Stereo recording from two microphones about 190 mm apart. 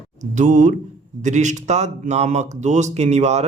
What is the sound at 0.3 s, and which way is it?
Speech, 40° right (ahead or behind).